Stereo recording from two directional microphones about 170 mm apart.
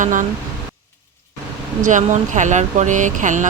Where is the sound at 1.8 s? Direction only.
45° right (ahead or behind).